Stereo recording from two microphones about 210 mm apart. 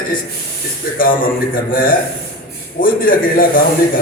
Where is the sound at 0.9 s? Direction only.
40° left (ahead or behind).